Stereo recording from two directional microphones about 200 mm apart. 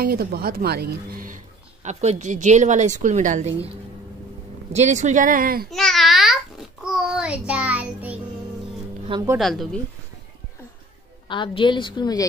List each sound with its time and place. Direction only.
0.0 s a woman's voice: 50° right (ahead or behind)
4.7 s a woman's voice: 35° right (ahead or behind)
5.7 s babbling: centre (ahead or behind)
9.1 s a woman's voice: 15° right (ahead or behind)
9.4 s speech: centre (ahead or behind)
11.2 s a woman's voice: 25° left (ahead or behind)